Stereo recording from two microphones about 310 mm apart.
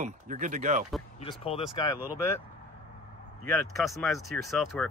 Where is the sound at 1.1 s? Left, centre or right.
Centre.